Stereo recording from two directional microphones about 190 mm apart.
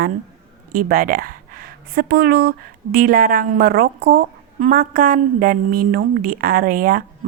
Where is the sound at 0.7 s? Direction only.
50° right (ahead or behind).